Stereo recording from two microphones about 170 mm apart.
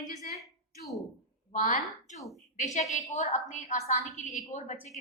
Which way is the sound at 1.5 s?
50° left (ahead or behind).